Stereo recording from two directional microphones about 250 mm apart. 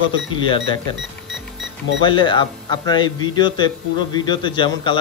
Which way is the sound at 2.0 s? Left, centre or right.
Centre.